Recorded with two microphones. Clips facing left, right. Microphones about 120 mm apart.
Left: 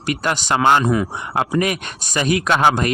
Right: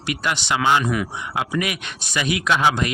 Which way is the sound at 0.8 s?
30° left (ahead or behind).